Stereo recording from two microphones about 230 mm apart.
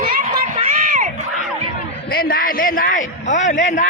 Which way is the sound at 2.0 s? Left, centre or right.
Left.